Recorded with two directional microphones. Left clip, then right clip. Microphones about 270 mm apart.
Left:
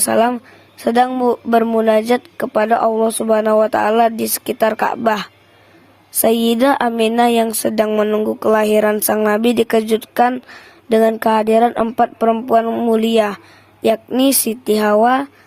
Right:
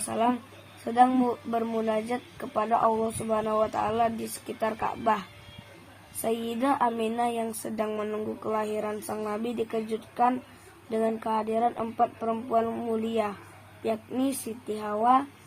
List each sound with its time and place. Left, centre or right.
0.1 s speech: left
6.2 s speech: left